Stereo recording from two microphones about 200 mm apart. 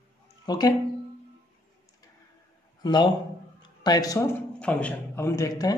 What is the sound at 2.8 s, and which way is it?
A man's voice, 20° left (ahead or behind).